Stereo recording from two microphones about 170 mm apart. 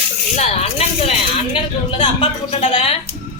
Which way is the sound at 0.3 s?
40° left (ahead or behind).